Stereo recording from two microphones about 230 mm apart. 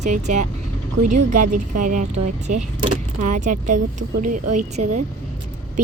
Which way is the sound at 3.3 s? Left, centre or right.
Right.